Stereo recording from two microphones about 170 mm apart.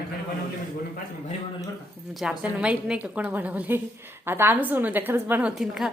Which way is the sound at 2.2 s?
5° right (ahead or behind).